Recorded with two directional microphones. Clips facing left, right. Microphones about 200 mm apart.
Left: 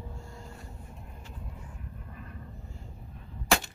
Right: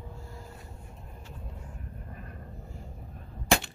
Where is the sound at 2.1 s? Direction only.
45° right (ahead or behind).